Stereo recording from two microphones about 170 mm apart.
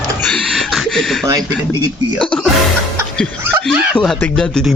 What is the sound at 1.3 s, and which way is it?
Speech, 20° right (ahead or behind).